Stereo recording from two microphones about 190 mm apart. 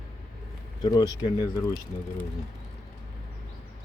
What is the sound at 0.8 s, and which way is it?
Speech, 20° left (ahead or behind).